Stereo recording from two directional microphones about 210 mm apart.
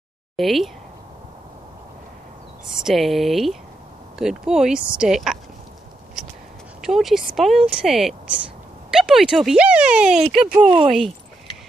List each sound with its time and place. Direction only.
0.4 s speech: centre (ahead or behind)
2.6 s speech: centre (ahead or behind)
6.8 s speech: centre (ahead or behind)
10.6 s speech: 20° right (ahead or behind)